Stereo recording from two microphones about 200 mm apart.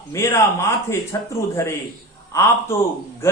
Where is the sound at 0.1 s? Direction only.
15° left (ahead or behind).